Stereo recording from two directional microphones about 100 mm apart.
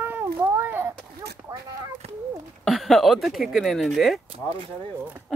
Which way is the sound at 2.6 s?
Centre (ahead or behind).